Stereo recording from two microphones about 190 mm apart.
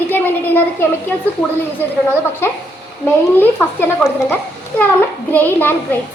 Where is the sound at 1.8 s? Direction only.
10° left (ahead or behind).